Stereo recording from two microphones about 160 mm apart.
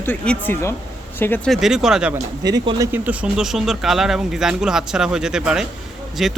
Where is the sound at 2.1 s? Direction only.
25° right (ahead or behind).